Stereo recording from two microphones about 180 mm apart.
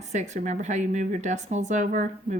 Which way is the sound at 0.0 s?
40° right (ahead or behind).